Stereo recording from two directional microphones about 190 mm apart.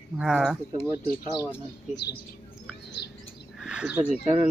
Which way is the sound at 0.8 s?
25° right (ahead or behind).